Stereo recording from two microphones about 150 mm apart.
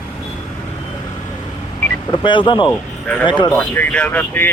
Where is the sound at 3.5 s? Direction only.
10° left (ahead or behind).